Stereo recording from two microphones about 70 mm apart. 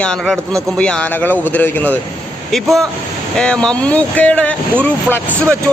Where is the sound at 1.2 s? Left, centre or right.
Left.